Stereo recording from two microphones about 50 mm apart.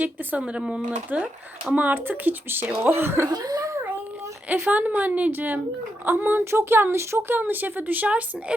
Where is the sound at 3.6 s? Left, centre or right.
Right.